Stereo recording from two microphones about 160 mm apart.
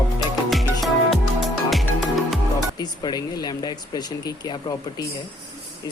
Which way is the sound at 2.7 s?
25° left (ahead or behind).